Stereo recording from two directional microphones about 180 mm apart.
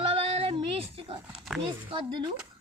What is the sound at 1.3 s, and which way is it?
Speech, centre (ahead or behind).